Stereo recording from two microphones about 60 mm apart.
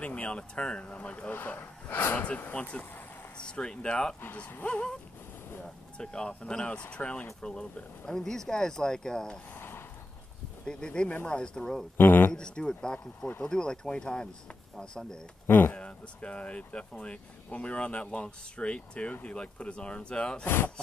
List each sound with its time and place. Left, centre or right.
0.0 s speech: left
1.3 s speech: left
3.3 s speech: centre
4.2 s speech: left
5.9 s speech: centre
9.6 s a sound: left
10.6 s speech: centre
11.1 s speech: left
11.3 s speech: centre
12.0 s speech: left
12.3 s speech: centre
15.4 s speech: left
15.7 s speech: left
20.4 s speech: left